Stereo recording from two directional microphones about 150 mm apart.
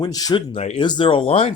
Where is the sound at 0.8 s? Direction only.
30° left (ahead or behind).